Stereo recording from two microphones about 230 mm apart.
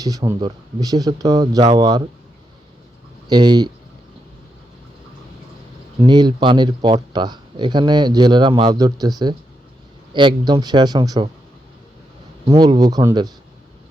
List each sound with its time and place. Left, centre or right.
0.0 s speech: centre
3.2 s speech: centre
6.0 s speech: centre
12.5 s speech: centre